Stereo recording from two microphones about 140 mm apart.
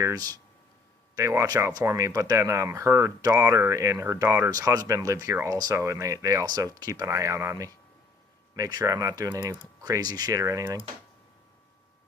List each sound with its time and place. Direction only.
0.0 s speech: 25° right (ahead or behind)